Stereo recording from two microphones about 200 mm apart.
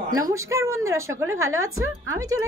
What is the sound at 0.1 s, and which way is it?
Speech, 15° right (ahead or behind).